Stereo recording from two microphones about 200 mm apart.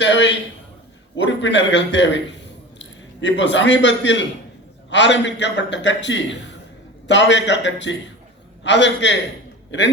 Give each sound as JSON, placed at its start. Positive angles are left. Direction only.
{"t": 0.0, "sound": "a man's voice", "side_deg": 65}